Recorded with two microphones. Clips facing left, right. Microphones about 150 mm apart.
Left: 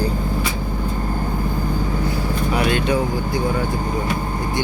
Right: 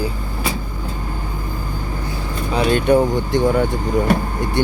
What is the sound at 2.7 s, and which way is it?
Speech, 50° right (ahead or behind).